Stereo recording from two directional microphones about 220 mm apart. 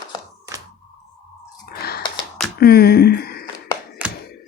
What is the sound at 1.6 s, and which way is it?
Chewing, 45° left (ahead or behind).